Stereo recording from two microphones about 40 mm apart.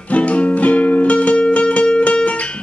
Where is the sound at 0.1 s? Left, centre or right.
Left.